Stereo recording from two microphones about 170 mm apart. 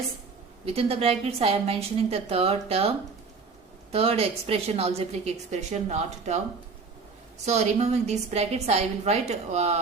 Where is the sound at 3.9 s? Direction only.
35° right (ahead or behind).